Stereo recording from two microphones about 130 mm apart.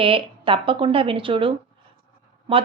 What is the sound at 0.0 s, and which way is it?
A woman's voice, 45° right (ahead or behind).